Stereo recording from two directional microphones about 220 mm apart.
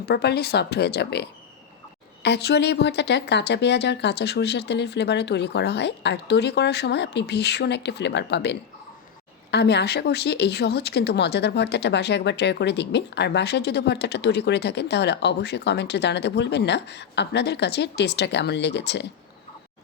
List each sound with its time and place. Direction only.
0.0 s speech: 45° left (ahead or behind)